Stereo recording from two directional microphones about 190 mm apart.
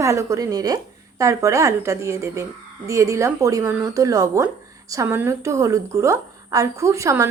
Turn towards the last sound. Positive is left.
turn(degrees=-15)  # may be behind; listen again after turning